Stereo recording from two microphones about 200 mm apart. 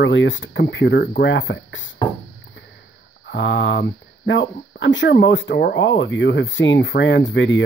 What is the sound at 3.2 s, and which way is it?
Speech, 65° left (ahead or behind).